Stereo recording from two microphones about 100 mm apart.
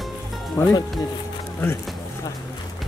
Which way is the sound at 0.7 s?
40° left (ahead or behind).